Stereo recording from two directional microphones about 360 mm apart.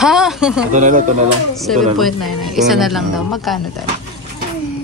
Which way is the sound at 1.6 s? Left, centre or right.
Centre.